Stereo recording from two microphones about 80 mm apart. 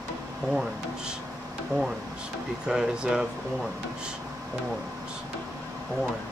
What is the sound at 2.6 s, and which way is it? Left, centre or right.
Speech, centre.